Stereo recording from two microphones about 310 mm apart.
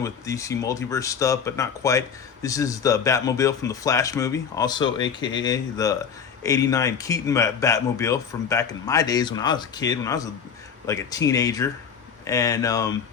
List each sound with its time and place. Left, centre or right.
0.0 s speech: centre